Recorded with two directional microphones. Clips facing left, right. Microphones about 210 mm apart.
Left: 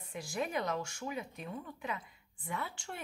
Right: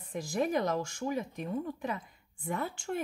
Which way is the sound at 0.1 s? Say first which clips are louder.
Right 6 dB; 40° right (ahead or behind).